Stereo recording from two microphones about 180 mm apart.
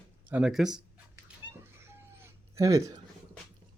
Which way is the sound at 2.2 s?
15° right (ahead or behind).